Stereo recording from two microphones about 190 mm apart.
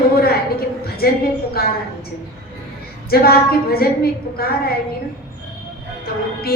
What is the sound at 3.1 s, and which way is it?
A woman's voice, 55° left (ahead or behind).